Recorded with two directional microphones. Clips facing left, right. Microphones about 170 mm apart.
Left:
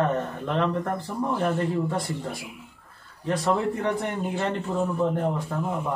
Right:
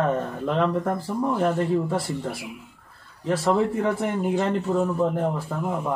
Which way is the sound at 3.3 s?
5° right (ahead or behind).